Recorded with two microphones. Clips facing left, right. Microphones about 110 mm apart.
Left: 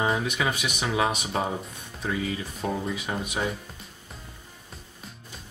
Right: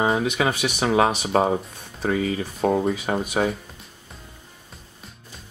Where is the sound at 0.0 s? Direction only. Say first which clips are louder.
Right 5 dB; 30° right (ahead or behind).